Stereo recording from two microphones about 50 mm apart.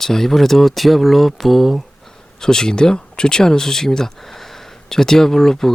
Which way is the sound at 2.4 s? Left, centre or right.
Centre.